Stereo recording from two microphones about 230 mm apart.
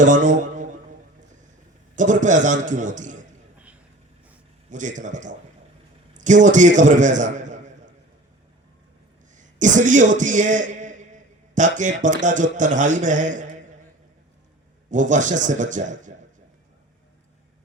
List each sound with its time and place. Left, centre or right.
0.0 s a man's voice: right
2.0 s a man's voice: right
4.7 s a man's voice: right
9.3 s a man's voice: right
14.8 s a man's voice: right